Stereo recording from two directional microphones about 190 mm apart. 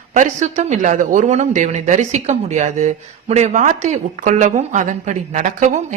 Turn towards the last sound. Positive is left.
turn(degrees=-40)  # may be behind; listen again after turning